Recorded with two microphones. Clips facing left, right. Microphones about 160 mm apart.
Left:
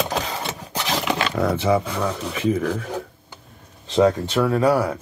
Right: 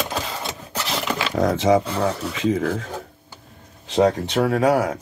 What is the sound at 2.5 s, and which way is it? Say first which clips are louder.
Speech: right 1 dB; 40° right (ahead or behind).